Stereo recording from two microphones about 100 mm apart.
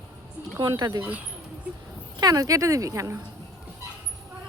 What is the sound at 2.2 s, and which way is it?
Speech, 40° right (ahead or behind).